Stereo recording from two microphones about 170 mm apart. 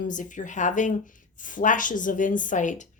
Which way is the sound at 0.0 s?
50° left (ahead or behind).